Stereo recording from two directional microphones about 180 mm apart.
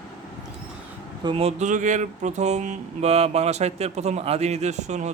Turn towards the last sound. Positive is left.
turn(degrees=-40)  # may be behind; listen again after turning